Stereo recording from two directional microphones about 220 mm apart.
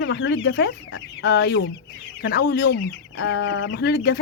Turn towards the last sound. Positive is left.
turn(degrees=50)  # may be behind; listen again after turning